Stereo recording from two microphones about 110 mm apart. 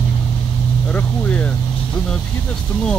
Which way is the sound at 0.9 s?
15° left (ahead or behind).